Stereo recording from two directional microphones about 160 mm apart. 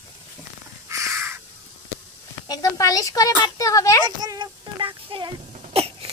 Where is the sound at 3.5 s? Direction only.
20° left (ahead or behind).